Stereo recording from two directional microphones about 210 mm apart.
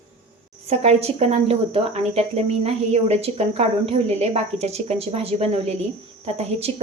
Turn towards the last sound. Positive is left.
turn(degrees=-30)  # may be behind; listen again after turning